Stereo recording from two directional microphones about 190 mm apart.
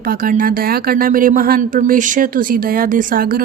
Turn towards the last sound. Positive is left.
turn(degrees=-50)  # may be behind; listen again after turning